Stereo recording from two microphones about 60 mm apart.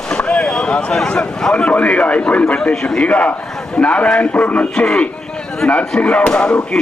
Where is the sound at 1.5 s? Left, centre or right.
Left.